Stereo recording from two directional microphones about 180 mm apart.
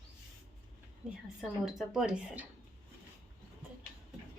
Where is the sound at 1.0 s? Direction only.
5° right (ahead or behind).